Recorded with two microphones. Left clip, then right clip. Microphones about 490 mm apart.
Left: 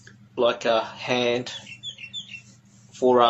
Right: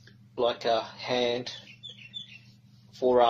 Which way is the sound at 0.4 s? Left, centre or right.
Left.